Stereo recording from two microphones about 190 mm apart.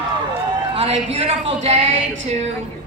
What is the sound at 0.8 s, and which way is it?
A woman's voice, 30° right (ahead or behind).